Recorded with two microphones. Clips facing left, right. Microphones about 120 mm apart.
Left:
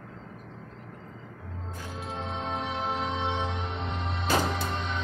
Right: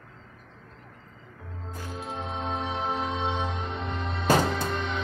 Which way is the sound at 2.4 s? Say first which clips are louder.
Right 2 dB; 20° right (ahead or behind).